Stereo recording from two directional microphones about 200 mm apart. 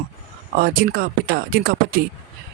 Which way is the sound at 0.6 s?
45° right (ahead or behind).